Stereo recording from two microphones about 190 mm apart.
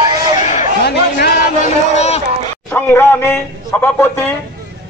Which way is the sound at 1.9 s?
35° left (ahead or behind).